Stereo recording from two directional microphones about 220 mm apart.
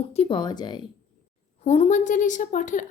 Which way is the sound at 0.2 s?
20° left (ahead or behind).